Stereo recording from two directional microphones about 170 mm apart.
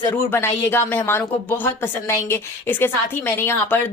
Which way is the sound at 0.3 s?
15° left (ahead or behind).